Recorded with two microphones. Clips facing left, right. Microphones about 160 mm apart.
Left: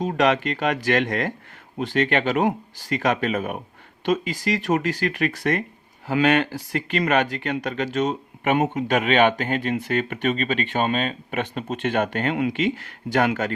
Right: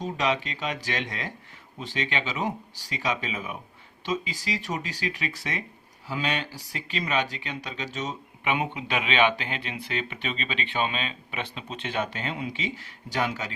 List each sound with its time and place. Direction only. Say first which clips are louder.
0.0 s speech: left 7 dB; 60° left (ahead or behind)